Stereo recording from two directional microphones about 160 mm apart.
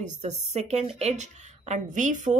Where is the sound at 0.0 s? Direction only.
45° right (ahead or behind).